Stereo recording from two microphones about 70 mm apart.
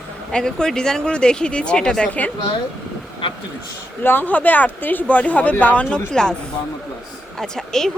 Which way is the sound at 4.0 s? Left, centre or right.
Left.